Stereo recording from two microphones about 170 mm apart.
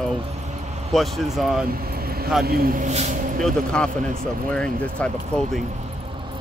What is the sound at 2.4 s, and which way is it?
Speech, 65° right (ahead or behind).